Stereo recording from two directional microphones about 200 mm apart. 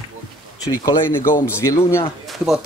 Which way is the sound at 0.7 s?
15° left (ahead or behind).